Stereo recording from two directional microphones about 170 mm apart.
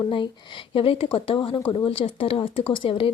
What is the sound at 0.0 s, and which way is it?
Speech, 30° left (ahead or behind).